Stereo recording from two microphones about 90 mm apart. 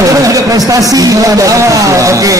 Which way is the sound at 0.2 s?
40° right (ahead or behind).